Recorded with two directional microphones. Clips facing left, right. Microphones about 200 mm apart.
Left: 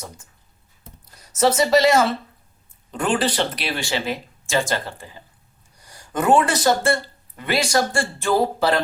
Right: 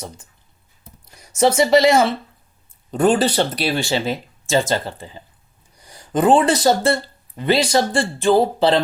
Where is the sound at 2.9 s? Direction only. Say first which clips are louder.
Right 5 dB; 35° right (ahead or behind).